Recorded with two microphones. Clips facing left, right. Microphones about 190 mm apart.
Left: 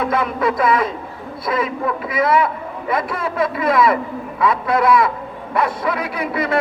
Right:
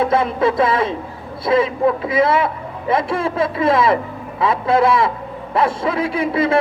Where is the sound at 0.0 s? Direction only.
30° right (ahead or behind).